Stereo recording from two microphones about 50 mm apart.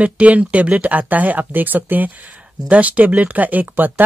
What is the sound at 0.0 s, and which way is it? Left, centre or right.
Speech, right.